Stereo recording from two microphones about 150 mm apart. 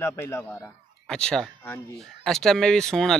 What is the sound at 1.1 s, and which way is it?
Speech, 5° left (ahead or behind).